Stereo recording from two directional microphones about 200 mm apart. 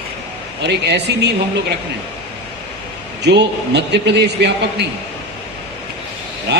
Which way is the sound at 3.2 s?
60° right (ahead or behind).